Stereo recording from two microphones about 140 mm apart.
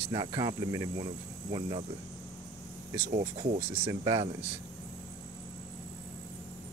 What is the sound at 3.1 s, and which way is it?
Speech, 50° right (ahead or behind).